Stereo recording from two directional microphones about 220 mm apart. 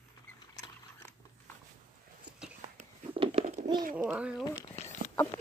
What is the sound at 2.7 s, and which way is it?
Babbling, 25° right (ahead or behind).